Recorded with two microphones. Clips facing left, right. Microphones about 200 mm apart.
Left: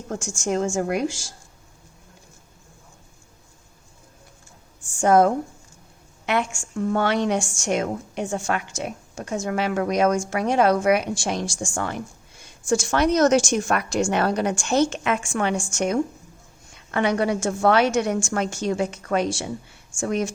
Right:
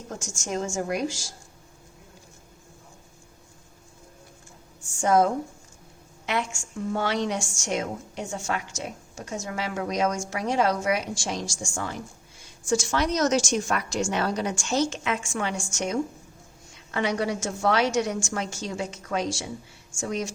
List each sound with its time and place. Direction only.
0.2 s a woman's voice: 50° left (ahead or behind)
4.9 s a woman's voice: 55° left (ahead or behind)